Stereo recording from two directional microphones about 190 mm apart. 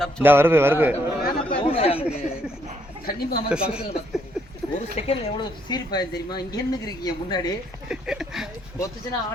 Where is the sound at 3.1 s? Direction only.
55° left (ahead or behind).